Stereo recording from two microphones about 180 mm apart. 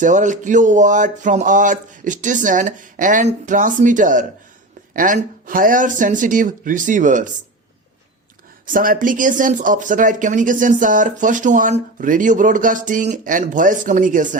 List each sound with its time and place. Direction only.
0.0 s speech: 45° right (ahead or behind)
8.6 s speech: 50° right (ahead or behind)